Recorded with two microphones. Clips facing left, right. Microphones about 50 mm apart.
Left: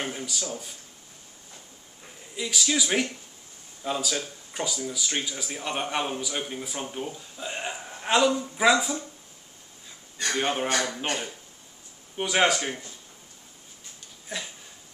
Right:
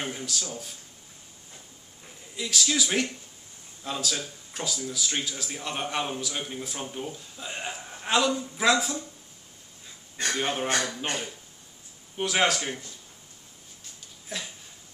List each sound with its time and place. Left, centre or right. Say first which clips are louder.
0.0 s a sound: left 1 dB; centre
2.3 s speech: left 1 dB; centre
10.3 s speech: left 2 dB; centre
14.3 s speech: left 1 dB; centre